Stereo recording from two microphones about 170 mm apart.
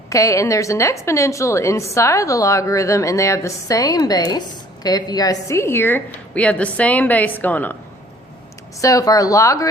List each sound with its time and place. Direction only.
0.1 s a woman's voice: 20° left (ahead or behind)
8.8 s a woman's voice: 20° left (ahead or behind)